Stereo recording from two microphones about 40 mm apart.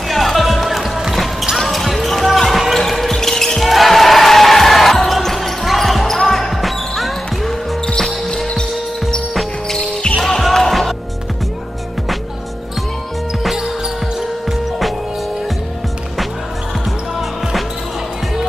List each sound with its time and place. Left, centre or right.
0.1 s music: centre
1.6 s basketball bounce: centre
9.7 s basketball bounce: left
10.4 s music: centre